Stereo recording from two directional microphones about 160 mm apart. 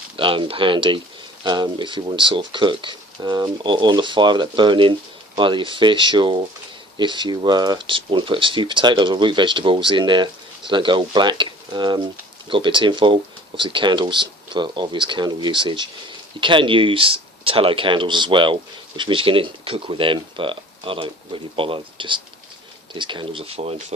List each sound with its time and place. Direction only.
0.2 s speech: 35° right (ahead or behind)